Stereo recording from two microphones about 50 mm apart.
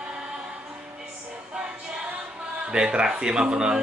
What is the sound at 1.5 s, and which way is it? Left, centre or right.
Music, centre.